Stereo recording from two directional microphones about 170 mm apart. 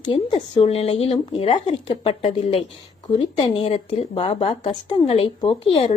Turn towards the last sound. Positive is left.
turn(degrees=35)  # may be behind; listen again after turning